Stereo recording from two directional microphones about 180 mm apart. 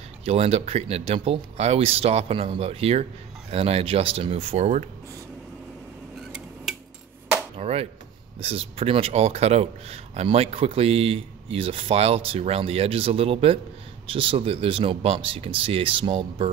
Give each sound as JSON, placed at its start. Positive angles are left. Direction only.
{"t": 0.2, "sound": "speech", "side_deg": -35}
{"t": 7.5, "sound": "speech", "side_deg": -35}